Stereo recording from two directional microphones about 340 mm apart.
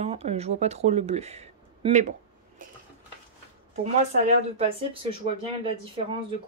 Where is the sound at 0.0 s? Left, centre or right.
Centre.